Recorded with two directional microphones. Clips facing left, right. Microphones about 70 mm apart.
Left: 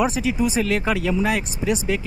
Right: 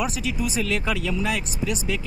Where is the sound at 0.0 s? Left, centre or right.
Left.